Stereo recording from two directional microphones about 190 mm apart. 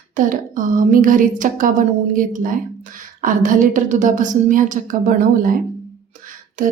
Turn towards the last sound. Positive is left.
turn(degrees=-45)  # may be behind; listen again after turning